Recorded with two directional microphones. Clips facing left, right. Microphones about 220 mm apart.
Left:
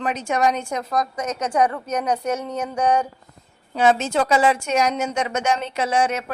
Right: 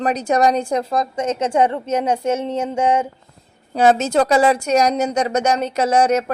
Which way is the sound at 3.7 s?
40° right (ahead or behind).